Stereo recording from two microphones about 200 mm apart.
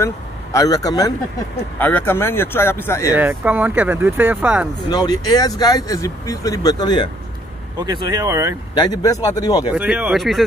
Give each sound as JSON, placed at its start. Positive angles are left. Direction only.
{"t": 0.0, "sound": "speech", "side_deg": 15}
{"t": 3.2, "sound": "speech", "side_deg": -10}
{"t": 4.8, "sound": "speech", "side_deg": 20}
{"t": 7.8, "sound": "speech", "side_deg": -20}
{"t": 8.7, "sound": "speech", "side_deg": 20}
{"t": 9.7, "sound": "speech", "side_deg": -5}